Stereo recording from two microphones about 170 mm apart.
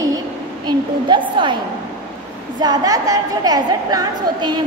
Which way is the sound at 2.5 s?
25° right (ahead or behind).